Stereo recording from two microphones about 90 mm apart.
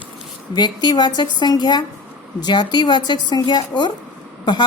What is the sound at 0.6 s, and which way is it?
A woman's voice, 50° left (ahead or behind).